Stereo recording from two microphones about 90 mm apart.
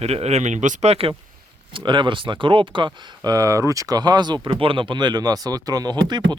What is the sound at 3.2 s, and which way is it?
Speech, 40° right (ahead or behind).